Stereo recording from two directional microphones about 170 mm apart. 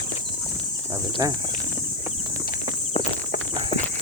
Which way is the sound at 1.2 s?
25° right (ahead or behind).